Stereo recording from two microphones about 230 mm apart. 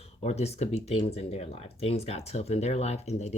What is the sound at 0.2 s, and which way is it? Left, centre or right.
Speech, left.